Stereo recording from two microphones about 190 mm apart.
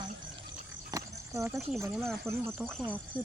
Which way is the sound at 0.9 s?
15° right (ahead or behind).